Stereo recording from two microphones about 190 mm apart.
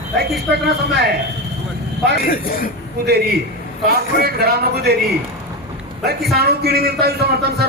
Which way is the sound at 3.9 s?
55° right (ahead or behind).